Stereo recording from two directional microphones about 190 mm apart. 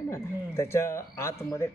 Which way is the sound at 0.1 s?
15° left (ahead or behind).